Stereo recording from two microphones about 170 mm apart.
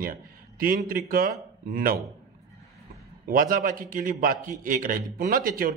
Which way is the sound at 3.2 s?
55° right (ahead or behind).